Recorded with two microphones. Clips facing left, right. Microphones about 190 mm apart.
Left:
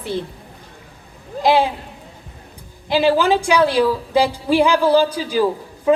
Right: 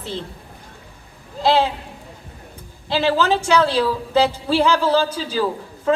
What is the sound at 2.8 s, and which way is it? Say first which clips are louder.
A woman's voice: left 3 dB; 15° left (ahead or behind).